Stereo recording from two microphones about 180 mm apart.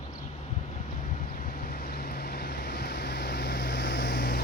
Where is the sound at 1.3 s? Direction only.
55° left (ahead or behind).